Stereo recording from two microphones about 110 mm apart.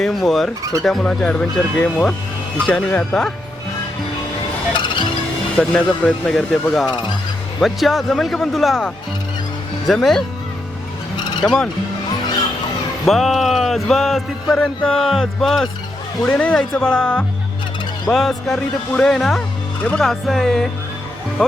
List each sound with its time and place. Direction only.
0.0 s speech: centre (ahead or behind)
4.7 s music: 45° left (ahead or behind)
5.5 s speech: 10° left (ahead or behind)
6.8 s speech: 40° left (ahead or behind)
7.6 s speech: centre (ahead or behind)
11.4 s speech: 5° left (ahead or behind)
13.1 s speech: centre (ahead or behind)
16.2 s speech: 15° left (ahead or behind)